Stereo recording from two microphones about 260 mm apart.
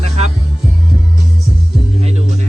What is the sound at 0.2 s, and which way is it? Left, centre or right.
Music, right.